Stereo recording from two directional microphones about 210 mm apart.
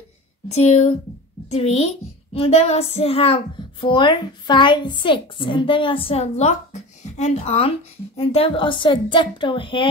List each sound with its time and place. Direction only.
0.5 s a woman's voice: 30° left (ahead or behind)